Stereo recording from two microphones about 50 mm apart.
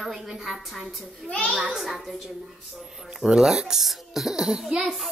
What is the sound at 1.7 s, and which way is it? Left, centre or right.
A child's voice, centre.